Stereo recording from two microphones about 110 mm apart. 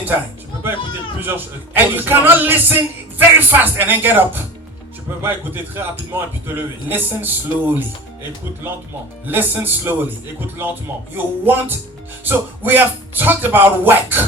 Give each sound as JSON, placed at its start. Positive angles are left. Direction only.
{"t": 1.2, "sound": "a man's voice", "side_deg": -20}
{"t": 9.2, "sound": "a man's voice", "side_deg": -15}